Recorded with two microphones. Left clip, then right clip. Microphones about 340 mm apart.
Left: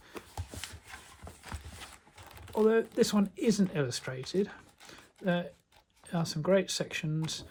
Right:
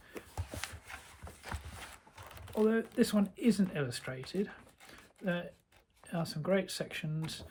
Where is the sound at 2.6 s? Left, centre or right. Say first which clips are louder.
Left 6 dB; centre.